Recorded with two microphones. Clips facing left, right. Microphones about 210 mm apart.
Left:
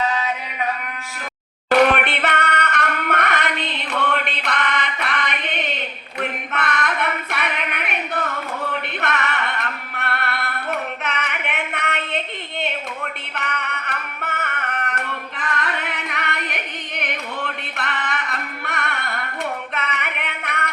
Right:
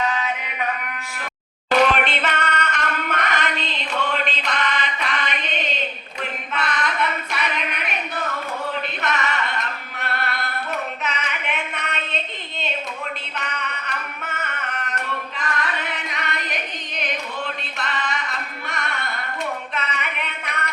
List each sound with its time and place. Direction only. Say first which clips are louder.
1.7 s singing: left 2 dB; 60° left (ahead or behind)
6.5 s female singing: right 2 dB; 60° left (ahead or behind)
8.9 s singing: left 1 dB; 60° left (ahead or behind)
13.3 s music: left 2 dB; 60° left (ahead or behind)
14.8 s singing: left 3 dB; 60° left (ahead or behind)
16.0 s music: left 1 dB; 60° left (ahead or behind)
19.7 s a sound: left 1 dB; 65° left (ahead or behind)